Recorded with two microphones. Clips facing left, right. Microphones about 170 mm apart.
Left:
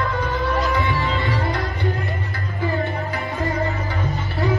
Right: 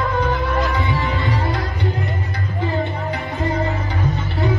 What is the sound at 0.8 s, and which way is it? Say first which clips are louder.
Music: even; 20° right (ahead or behind).